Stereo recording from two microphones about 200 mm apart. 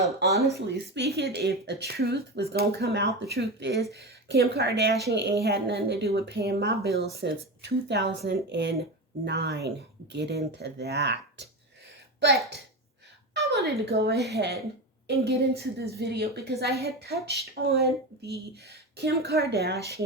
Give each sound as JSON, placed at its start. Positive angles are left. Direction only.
{"t": 0.7, "sound": "speech", "side_deg": -55}